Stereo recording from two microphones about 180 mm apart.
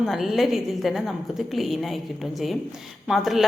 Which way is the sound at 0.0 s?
Centre (ahead or behind).